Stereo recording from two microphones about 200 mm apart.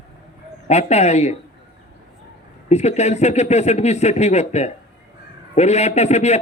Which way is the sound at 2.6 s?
35° left (ahead or behind).